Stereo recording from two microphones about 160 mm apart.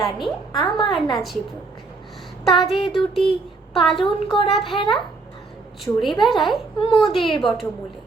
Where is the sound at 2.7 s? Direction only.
30° left (ahead or behind).